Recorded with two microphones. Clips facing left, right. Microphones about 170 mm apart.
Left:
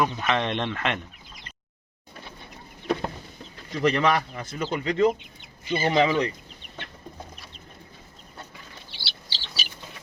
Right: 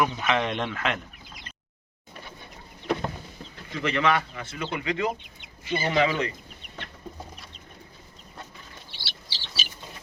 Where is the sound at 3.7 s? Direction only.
35° left (ahead or behind).